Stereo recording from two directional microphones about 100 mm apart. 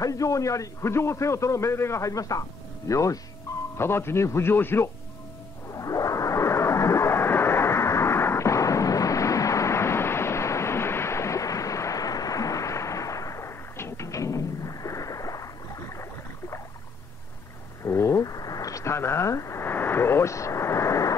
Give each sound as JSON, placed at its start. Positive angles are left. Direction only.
{"t": 0.0, "sound": "a man's voice", "side_deg": 35}
{"t": 5.7, "sound": "music", "side_deg": 35}
{"t": 17.8, "sound": "a sound", "side_deg": 30}